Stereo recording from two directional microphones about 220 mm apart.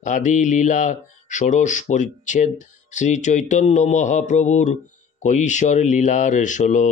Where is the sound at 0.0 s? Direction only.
35° left (ahead or behind).